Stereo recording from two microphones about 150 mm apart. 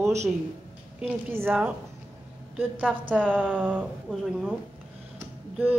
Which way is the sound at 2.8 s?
10° right (ahead or behind).